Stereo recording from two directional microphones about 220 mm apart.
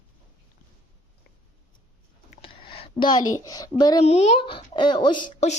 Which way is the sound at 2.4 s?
25° left (ahead or behind).